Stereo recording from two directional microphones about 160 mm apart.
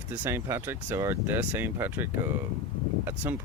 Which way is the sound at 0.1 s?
15° right (ahead or behind).